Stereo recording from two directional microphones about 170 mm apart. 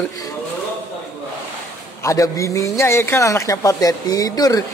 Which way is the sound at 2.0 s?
20° left (ahead or behind).